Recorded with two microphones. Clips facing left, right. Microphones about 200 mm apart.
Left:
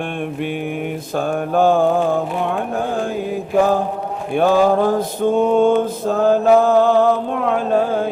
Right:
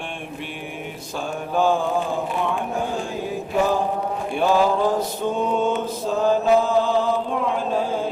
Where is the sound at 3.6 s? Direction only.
55° left (ahead or behind).